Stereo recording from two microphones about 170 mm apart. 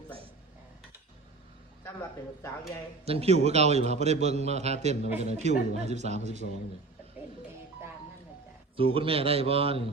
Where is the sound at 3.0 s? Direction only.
35° right (ahead or behind).